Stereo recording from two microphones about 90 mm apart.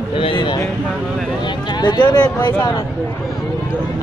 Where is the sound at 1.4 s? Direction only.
55° left (ahead or behind).